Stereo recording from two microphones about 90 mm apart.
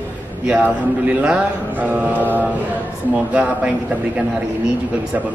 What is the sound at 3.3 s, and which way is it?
Speech, 15° right (ahead or behind).